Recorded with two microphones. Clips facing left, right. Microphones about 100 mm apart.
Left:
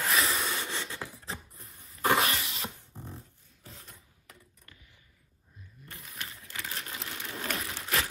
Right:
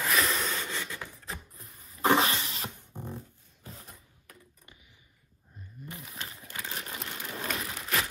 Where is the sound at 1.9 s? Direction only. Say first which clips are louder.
Right 2 dB; 30° right (ahead or behind).